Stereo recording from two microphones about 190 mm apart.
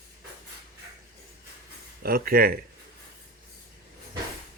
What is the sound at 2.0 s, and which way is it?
Speech, 50° right (ahead or behind).